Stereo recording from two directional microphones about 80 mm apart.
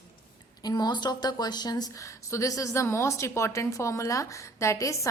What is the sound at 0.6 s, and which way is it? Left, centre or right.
A woman's voice, left.